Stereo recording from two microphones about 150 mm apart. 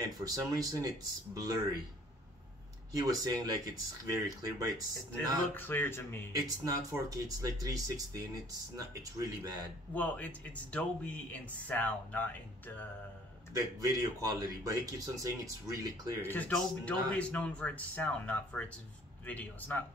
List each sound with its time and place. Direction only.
0.2 s speech: 25° right (ahead or behind)
2.9 s speech: 25° right (ahead or behind)
5.5 s speech: 15° left (ahead or behind)
6.4 s speech: 25° right (ahead or behind)
9.9 s speech: 10° left (ahead or behind)
13.5 s speech: 25° right (ahead or behind)
16.2 s speech: 10° left (ahead or behind)